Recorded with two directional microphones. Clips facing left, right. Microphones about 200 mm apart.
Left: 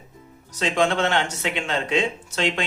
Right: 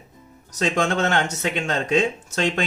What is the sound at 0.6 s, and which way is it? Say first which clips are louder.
Speech: even; 45° right (ahead or behind).